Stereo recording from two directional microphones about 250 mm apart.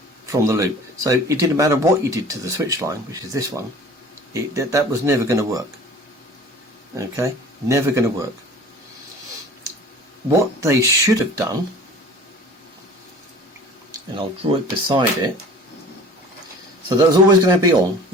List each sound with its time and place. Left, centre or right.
0.3 s speech: centre
6.9 s speech: centre
10.2 s speech: centre
13.9 s speech: centre
17.0 s speech: centre